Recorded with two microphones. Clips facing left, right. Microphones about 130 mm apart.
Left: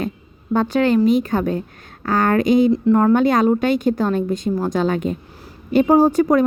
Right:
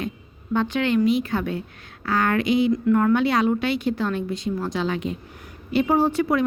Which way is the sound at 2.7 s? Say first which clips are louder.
Left 4 dB; 30° left (ahead or behind).